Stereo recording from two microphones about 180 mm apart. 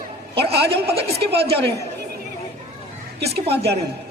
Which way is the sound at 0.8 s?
35° right (ahead or behind).